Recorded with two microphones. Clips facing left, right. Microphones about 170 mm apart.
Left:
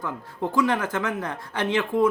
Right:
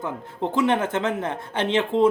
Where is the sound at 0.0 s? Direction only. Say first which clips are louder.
Right 2 dB; 20° right (ahead or behind).